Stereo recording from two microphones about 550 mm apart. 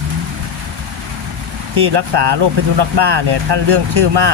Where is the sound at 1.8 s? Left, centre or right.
Right.